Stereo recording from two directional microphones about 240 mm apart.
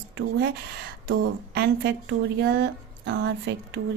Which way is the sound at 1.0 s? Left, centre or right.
Right.